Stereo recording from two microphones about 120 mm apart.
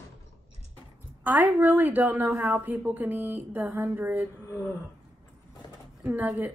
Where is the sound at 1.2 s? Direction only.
15° right (ahead or behind).